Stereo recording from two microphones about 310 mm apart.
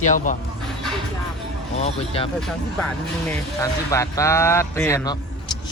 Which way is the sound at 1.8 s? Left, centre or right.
Centre.